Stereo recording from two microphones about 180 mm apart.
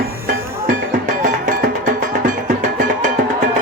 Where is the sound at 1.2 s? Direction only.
50° right (ahead or behind).